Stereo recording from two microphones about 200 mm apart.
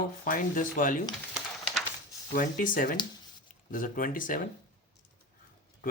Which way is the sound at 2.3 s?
45° left (ahead or behind).